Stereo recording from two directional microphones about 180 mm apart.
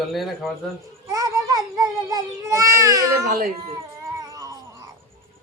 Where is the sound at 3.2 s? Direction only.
50° right (ahead or behind).